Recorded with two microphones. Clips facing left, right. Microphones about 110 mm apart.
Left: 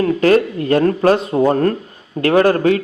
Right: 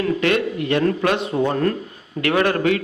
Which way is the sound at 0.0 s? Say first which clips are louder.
Left 6 dB; 35° left (ahead or behind).